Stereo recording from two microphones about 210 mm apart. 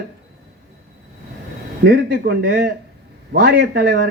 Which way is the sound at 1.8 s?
50° right (ahead or behind).